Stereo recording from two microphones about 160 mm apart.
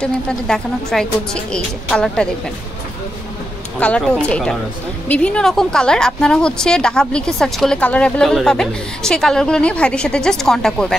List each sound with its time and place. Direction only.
0.0 s a woman's voice: 5° left (ahead or behind)
3.8 s a woman's voice: 5° left (ahead or behind)